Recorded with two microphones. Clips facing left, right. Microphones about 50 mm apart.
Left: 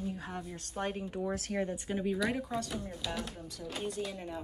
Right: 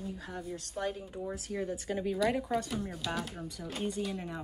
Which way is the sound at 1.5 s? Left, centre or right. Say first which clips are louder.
Right 2 dB; left.